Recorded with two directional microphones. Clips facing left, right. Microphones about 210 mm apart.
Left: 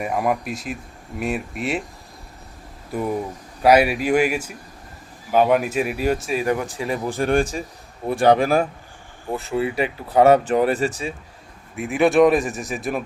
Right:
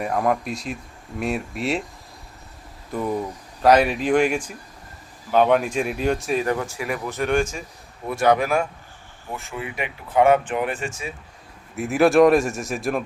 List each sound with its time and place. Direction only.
0.0 s speech: 5° left (ahead or behind)
2.9 s speech: 10° left (ahead or behind)
6.4 s speech: 15° left (ahead or behind); by 11.1 s 35° left (ahead or behind)
11.8 s speech: centre (ahead or behind)